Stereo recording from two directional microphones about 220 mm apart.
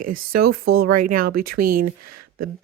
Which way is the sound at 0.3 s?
45° right (ahead or behind).